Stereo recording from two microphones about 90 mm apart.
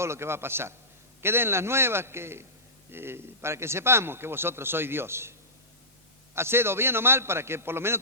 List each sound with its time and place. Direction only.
0.0 s a man's voice: 30° right (ahead or behind)
6.3 s a man's voice: 30° right (ahead or behind)